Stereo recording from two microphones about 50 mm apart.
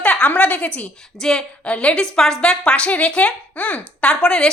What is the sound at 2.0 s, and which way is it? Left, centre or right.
A woman's voice, centre.